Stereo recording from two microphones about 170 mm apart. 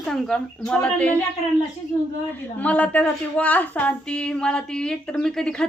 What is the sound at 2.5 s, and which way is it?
A woman's voice, 10° left (ahead or behind).